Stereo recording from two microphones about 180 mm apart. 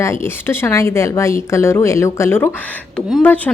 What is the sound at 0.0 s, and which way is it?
A woman's voice, 15° left (ahead or behind).